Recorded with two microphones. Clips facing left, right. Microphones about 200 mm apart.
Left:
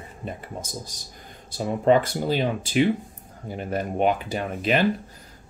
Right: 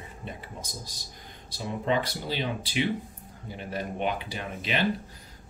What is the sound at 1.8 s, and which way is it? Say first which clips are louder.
Speech: left 9 dB; 45° left (ahead or behind).